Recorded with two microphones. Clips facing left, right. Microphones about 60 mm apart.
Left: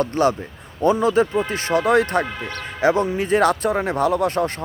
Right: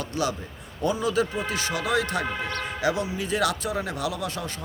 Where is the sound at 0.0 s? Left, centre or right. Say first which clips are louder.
Left 9 dB; left.